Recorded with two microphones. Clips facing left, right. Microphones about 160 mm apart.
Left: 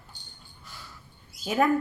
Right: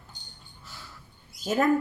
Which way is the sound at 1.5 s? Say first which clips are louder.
Even; 45° right (ahead or behind).